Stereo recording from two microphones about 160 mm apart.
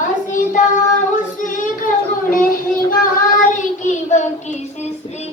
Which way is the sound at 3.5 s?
50° left (ahead or behind).